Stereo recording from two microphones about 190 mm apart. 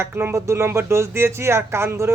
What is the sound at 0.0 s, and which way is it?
Speech, 15° right (ahead or behind).